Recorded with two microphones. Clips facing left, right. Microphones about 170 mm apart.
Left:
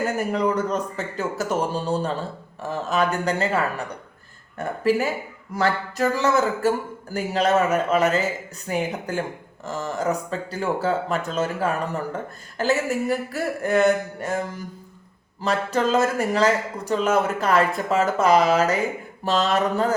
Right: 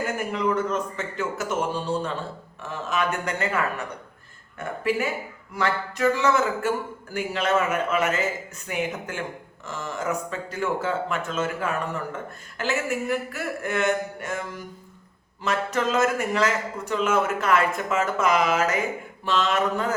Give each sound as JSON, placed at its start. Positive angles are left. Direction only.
{"t": 0.0, "sound": "speech", "side_deg": 40}